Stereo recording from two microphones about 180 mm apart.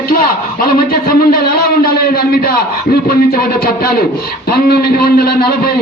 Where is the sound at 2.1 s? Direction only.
55° left (ahead or behind).